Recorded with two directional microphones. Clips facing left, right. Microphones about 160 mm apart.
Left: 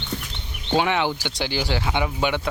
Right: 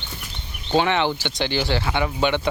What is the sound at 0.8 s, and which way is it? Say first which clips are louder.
Speech: right 2 dB; 10° left (ahead or behind).